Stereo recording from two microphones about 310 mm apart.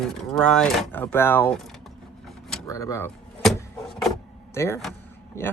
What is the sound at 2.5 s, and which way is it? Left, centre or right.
Door, centre.